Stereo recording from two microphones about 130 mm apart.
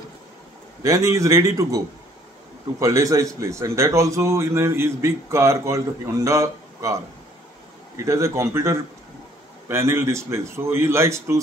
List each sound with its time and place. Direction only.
0.8 s a man's voice: 25° right (ahead or behind)
2.8 s a man's voice: 25° right (ahead or behind)
8.0 s a man's voice: 20° right (ahead or behind)